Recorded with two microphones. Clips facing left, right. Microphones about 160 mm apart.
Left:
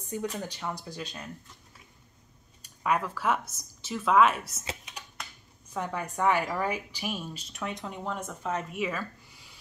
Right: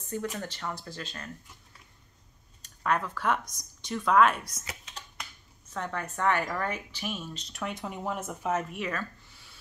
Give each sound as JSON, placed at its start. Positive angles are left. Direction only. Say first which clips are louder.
{"t": 0.1, "sound": "a woman's voice", "louder": "left 1 dB", "side_deg": 15}
{"t": 2.6, "sound": "speech", "louder": "left 1 dB", "side_deg": 10}
{"t": 4.6, "sound": "computer keyboard", "louder": "left 4 dB", "side_deg": 15}
{"t": 5.7, "sound": "a woman's voice", "louder": "left 1 dB", "side_deg": 10}